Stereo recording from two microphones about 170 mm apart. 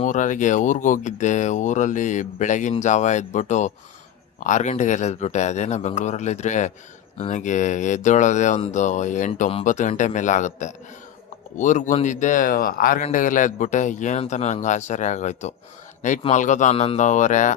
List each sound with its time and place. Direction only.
0.0 s speech: 45° left (ahead or behind)